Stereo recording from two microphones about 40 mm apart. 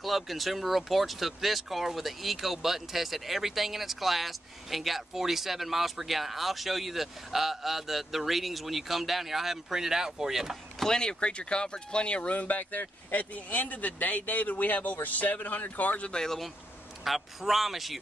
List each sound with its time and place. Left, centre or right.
0.0 s speech: centre
10.8 s speech: centre
12.4 s speech: left
16.1 s speech: centre
17.0 s speech: centre